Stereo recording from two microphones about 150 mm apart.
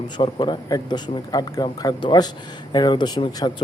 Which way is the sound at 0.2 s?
30° left (ahead or behind).